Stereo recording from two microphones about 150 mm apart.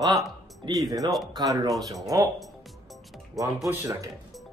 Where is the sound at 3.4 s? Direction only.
20° right (ahead or behind).